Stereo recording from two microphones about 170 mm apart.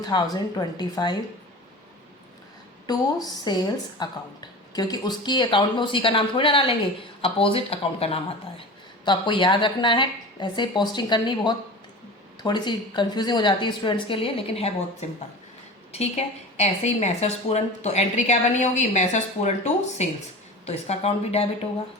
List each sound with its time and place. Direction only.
0.0 s a woman's voice: 25° left (ahead or behind)
2.8 s a woman's voice: 25° left (ahead or behind)
15.9 s a woman's voice: 40° left (ahead or behind)